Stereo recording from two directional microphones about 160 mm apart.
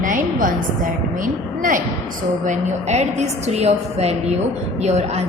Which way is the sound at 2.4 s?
45° right (ahead or behind).